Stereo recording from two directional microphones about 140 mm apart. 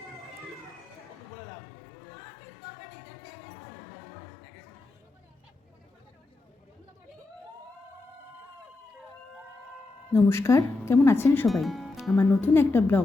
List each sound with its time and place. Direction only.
10.1 s speech: 20° left (ahead or behind)
11.4 s speech: centre (ahead or behind)
12.2 s speech: 15° left (ahead or behind)